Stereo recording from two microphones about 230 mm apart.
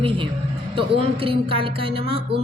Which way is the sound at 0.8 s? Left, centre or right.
Right.